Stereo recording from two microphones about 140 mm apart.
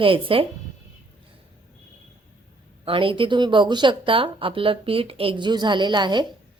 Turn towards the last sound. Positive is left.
turn(degrees=-30)  # may be behind; listen again after turning